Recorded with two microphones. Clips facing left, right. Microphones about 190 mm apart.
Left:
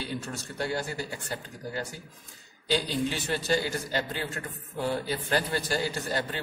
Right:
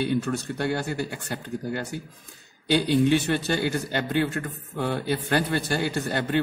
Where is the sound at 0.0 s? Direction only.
60° right (ahead or behind).